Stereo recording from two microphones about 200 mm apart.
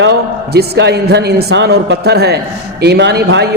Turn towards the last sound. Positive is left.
turn(degrees=-55)  # may be behind; listen again after turning